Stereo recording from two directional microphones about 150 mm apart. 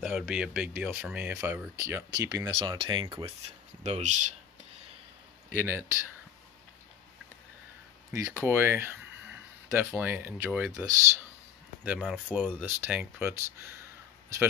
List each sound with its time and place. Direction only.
0.0 s speech: 10° right (ahead or behind); by 3.3 s 30° right (ahead or behind)
3.8 s speech: 50° right (ahead or behind)
5.5 s speech: 15° right (ahead or behind)
8.1 s speech: 20° right (ahead or behind)
11.8 s speech: 10° right (ahead or behind)